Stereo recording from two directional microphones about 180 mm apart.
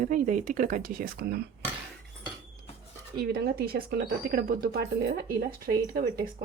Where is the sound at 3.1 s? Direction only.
60° right (ahead or behind).